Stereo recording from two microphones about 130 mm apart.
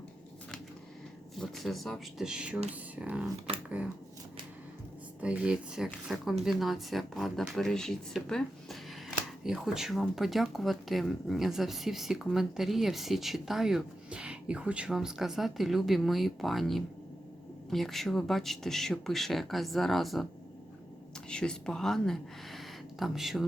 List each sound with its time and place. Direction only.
1.4 s speech: centre (ahead or behind)
5.2 s speech: 10° right (ahead or behind)
21.2 s speech: 5° left (ahead or behind)